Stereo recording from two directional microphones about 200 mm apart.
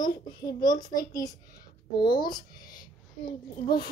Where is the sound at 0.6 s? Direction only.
20° left (ahead or behind).